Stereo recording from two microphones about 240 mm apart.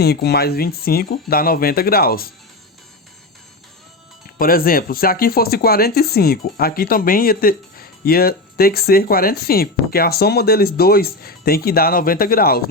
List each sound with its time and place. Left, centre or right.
0.0 s speech: left
4.4 s speech: left